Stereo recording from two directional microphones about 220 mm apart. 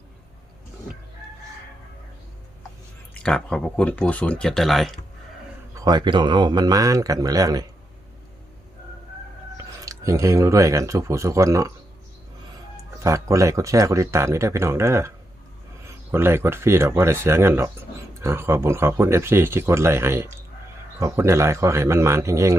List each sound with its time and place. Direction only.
3.2 s speech: 5° left (ahead or behind)
5.7 s speech: 20° right (ahead or behind)
9.8 s speech: 15° right (ahead or behind)
13.0 s speech: 15° right (ahead or behind)
16.1 s speech: 10° right (ahead or behind)